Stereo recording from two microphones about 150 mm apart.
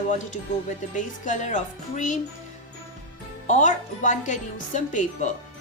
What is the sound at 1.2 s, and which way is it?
Speech, 55° left (ahead or behind).